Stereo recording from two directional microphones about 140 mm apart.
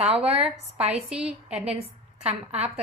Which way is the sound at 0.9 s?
5° right (ahead or behind).